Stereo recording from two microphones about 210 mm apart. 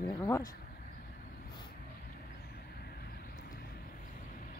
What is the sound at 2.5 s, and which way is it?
Vehicle, 45° left (ahead or behind).